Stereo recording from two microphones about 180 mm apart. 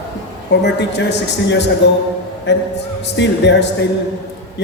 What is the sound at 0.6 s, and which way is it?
A woman's voice, 75° left (ahead or behind).